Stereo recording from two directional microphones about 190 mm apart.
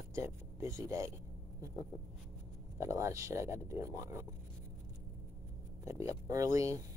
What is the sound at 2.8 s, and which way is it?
Speech, 15° right (ahead or behind).